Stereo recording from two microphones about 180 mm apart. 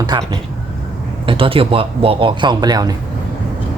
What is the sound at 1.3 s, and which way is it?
Speech, 30° right (ahead or behind).